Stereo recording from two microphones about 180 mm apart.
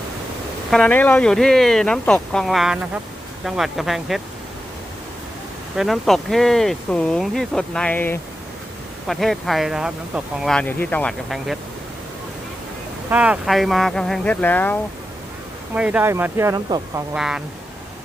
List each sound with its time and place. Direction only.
0.7 s speech: 5° left (ahead or behind)
5.7 s speech: centre (ahead or behind)
13.1 s speech: 5° right (ahead or behind); by 14.8 s 10° left (ahead or behind)
15.7 s speech: 10° right (ahead or behind)
17.2 s speech: 5° right (ahead or behind)